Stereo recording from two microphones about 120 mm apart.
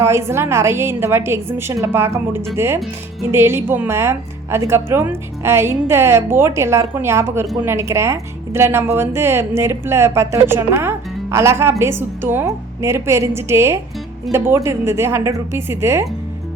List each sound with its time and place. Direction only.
0.0 s speech: 25° right (ahead or behind)